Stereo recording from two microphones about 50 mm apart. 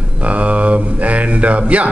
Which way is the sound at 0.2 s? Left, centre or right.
Right.